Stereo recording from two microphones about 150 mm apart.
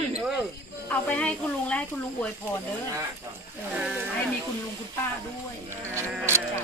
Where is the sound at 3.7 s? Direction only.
5° right (ahead or behind).